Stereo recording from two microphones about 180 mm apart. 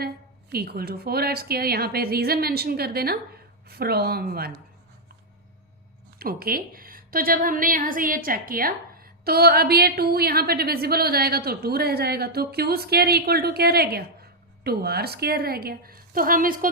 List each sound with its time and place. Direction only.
0.5 s a woman's voice: 60° right (ahead or behind)
6.1 s a woman's voice: 55° right (ahead or behind)